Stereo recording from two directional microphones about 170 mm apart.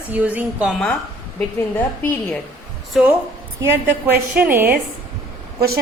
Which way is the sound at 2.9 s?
Centre (ahead or behind).